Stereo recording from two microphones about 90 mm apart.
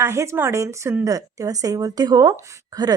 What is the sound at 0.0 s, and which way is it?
A woman's voice, 30° right (ahead or behind).